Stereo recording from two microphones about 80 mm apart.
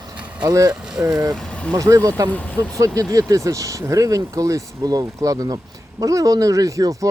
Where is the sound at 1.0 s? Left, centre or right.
Right.